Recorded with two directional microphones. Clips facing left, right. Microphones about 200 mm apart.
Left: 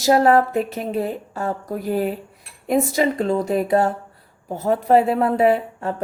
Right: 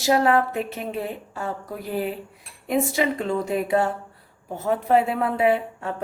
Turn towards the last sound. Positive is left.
turn(degrees=40)  # may be behind; listen again after turning